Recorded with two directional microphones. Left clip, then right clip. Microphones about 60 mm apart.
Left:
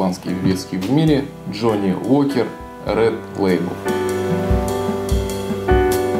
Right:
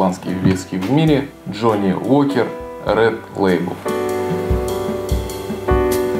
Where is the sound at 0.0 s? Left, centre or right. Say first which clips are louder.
Right 3 dB; left.